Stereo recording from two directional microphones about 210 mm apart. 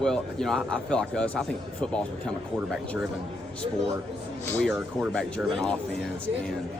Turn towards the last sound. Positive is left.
turn(degrees=0)  # may be behind; listen again after turning